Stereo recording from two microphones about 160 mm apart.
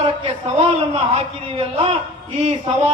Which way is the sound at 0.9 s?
40° right (ahead or behind).